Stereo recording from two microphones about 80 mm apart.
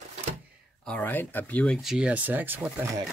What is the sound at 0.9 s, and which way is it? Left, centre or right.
Speech, left.